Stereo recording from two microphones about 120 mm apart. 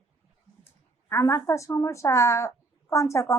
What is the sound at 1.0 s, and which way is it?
A woman's voice, 20° left (ahead or behind).